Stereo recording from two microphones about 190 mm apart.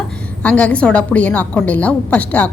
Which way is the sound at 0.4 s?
5° left (ahead or behind).